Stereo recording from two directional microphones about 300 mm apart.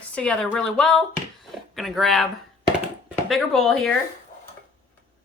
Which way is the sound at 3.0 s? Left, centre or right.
Centre.